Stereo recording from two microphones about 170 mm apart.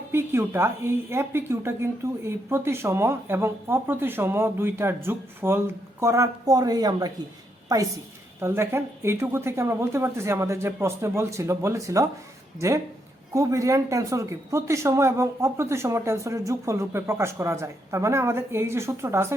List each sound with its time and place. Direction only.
0.1 s a woman's voice: 15° right (ahead or behind)